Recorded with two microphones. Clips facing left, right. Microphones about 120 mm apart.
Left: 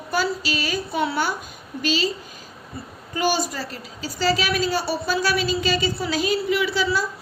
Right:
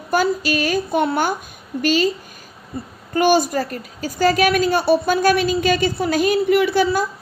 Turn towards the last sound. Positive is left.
turn(degrees=-55)  # may be behind; listen again after turning